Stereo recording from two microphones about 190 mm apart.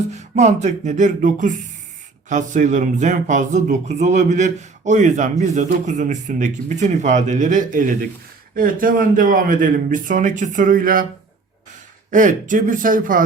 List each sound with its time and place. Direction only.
0.1 s speech: 35° right (ahead or behind)
12.1 s speech: 40° right (ahead or behind)